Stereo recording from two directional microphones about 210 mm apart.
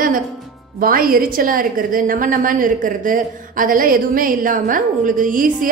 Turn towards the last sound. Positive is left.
turn(degrees=-40)  # may be behind; listen again after turning